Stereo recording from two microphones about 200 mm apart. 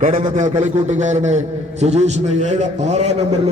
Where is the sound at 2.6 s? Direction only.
35° right (ahead or behind).